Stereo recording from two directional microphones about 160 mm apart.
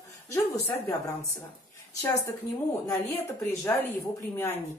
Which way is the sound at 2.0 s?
20° left (ahead or behind).